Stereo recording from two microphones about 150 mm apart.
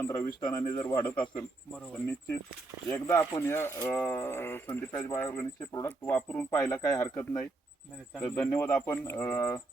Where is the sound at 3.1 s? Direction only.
15° left (ahead or behind).